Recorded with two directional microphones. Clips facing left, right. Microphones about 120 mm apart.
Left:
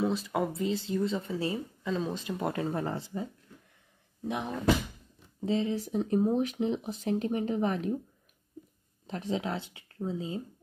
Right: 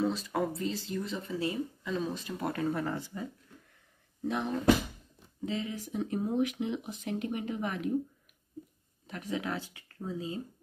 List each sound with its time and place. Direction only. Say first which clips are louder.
0.0 s speech: left 1 dB; 15° left (ahead or behind)
4.3 s speech: right 1 dB; 15° left (ahead or behind)
5.4 s speech: left 6 dB; 30° left (ahead or behind)
9.0 s speech: left 3 dB; 30° left (ahead or behind)